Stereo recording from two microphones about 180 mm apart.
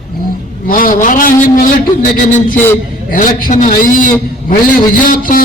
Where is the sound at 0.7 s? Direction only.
50° left (ahead or behind).